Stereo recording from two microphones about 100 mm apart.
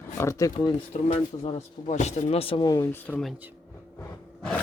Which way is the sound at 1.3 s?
65° left (ahead or behind).